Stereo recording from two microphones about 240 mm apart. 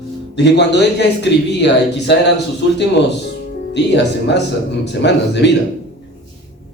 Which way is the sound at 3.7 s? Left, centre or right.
Left.